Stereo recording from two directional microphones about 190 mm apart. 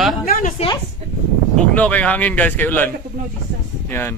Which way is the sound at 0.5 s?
25° left (ahead or behind).